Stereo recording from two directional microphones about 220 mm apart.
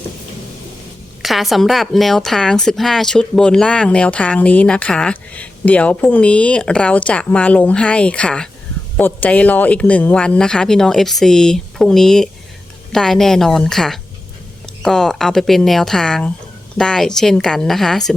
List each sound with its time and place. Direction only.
1.2 s speech: centre (ahead or behind)